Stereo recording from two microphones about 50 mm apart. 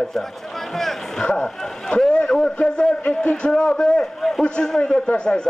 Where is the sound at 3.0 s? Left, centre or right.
Left.